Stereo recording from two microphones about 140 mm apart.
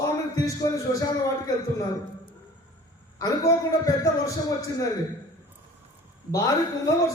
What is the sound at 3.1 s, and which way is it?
Speech, 25° left (ahead or behind).